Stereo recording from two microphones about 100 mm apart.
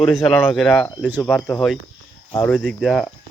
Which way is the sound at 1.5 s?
Centre (ahead or behind).